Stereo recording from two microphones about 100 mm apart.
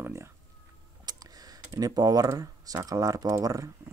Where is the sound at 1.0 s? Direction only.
40° right (ahead or behind).